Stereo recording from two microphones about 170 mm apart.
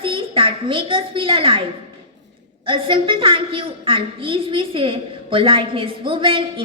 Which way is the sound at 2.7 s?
30° right (ahead or behind).